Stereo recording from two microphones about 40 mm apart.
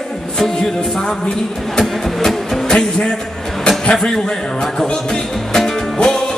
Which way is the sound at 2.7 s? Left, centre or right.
Centre.